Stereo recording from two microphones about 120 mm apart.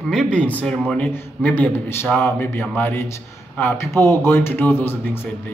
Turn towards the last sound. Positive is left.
turn(degrees=20)  # may be behind; listen again after turning